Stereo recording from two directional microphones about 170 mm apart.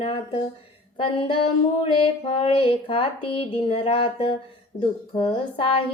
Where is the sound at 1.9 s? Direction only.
30° left (ahead or behind).